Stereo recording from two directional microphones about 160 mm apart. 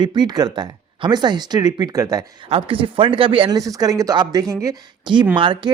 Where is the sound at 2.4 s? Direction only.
35° right (ahead or behind).